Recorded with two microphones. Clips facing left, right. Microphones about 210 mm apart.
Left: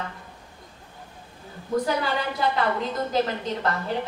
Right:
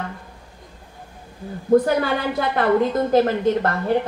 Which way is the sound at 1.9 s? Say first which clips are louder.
Right 5 dB; 55° right (ahead or behind).